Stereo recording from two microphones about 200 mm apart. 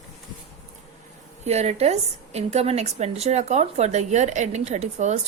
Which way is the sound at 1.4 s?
35° right (ahead or behind).